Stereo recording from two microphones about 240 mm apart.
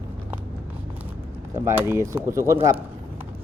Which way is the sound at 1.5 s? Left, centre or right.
Centre.